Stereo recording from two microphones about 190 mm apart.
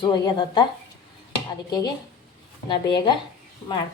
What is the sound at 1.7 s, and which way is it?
A woman's voice, 20° left (ahead or behind).